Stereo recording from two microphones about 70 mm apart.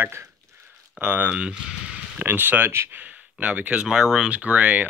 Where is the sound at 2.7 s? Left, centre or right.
Right.